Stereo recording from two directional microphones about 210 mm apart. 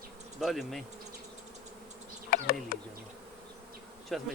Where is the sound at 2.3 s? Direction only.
45° left (ahead or behind).